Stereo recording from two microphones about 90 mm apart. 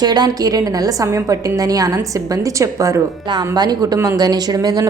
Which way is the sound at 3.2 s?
50° right (ahead or behind).